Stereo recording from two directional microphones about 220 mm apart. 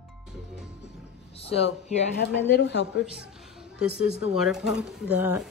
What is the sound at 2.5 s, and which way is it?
Speech, 50° left (ahead or behind).